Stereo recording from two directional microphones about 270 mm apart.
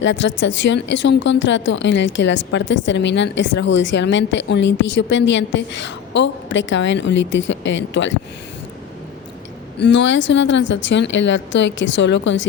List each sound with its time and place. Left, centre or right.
0.0 s speech: left
9.7 s a woman's voice: left